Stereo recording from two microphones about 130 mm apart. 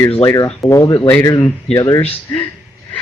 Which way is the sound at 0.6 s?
25° left (ahead or behind).